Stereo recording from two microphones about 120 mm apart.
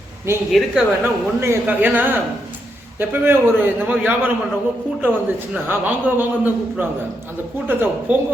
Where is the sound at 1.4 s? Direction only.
20° right (ahead or behind).